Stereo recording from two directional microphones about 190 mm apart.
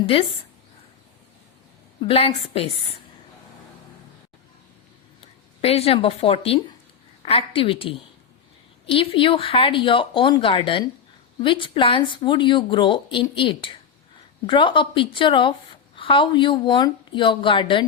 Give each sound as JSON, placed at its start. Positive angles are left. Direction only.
{"t": 0.0, "sound": "speech", "side_deg": 30}
{"t": 2.0, "sound": "speech", "side_deg": 30}
{"t": 5.6, "sound": "speech", "side_deg": 30}